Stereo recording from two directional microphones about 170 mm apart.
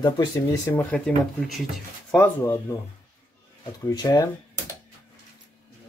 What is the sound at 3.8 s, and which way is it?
Speech, 20° left (ahead or behind).